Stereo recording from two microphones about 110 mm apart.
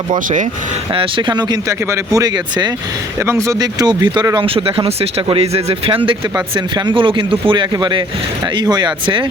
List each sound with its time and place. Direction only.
0.9 s speech: 45° right (ahead or behind)
3.2 s speech: 25° right (ahead or behind); by 4.3 s 40° right (ahead or behind)
4.4 s speech: 55° right (ahead or behind)
6.3 s speech: 40° right (ahead or behind)